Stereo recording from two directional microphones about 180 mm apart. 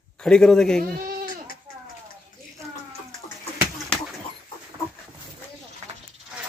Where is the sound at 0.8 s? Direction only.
55° right (ahead or behind).